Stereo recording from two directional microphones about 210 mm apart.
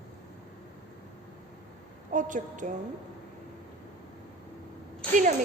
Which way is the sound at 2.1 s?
35° right (ahead or behind).